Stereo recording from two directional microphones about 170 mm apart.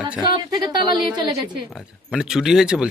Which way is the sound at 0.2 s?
25° right (ahead or behind).